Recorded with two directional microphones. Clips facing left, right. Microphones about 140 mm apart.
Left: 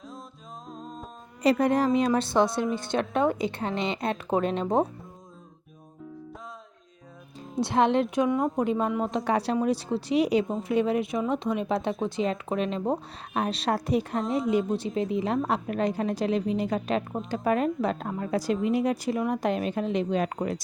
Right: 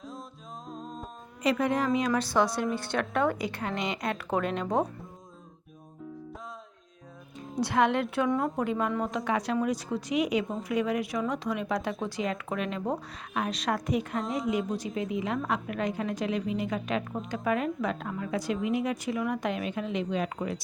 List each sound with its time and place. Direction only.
0.7 s music: centre (ahead or behind)
1.4 s a woman's voice: 35° left (ahead or behind)
7.6 s a woman's voice: 25° left (ahead or behind)
9.1 s a woman's voice: 35° left (ahead or behind)